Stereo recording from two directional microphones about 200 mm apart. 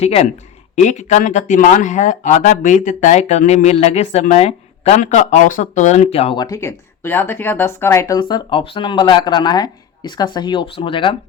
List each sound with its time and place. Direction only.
0.0 s speech: 30° left (ahead or behind)